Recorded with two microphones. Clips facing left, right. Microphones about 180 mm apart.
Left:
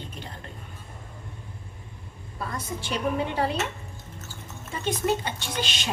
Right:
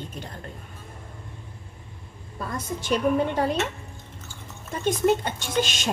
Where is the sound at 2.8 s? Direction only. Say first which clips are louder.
Right 5 dB; 45° right (ahead or behind).